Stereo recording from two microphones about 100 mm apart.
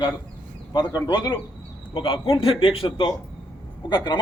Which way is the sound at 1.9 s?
60° left (ahead or behind).